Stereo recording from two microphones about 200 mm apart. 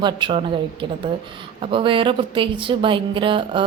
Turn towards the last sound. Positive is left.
turn(degrees=-25)  # may be behind; listen again after turning